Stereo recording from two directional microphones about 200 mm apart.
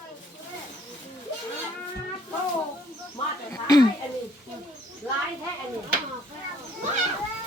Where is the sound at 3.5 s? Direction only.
20° left (ahead or behind).